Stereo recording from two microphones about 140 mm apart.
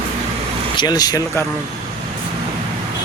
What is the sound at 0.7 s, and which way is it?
Speech, 30° left (ahead or behind).